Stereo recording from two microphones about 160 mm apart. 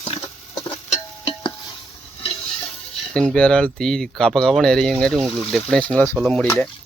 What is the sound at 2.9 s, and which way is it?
Speech, centre (ahead or behind).